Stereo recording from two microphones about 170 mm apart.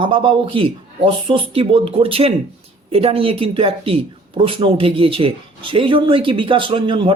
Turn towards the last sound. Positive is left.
turn(degrees=-30)  # may be behind; listen again after turning